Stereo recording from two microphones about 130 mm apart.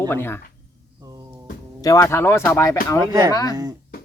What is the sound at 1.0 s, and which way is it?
Music, 30° right (ahead or behind).